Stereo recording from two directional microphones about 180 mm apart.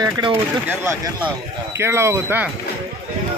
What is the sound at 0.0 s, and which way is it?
Speech, 25° right (ahead or behind).